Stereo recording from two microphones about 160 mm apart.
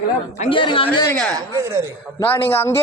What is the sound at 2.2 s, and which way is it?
Speech, 15° left (ahead or behind).